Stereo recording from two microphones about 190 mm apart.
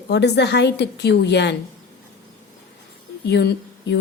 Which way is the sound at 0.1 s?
65° left (ahead or behind).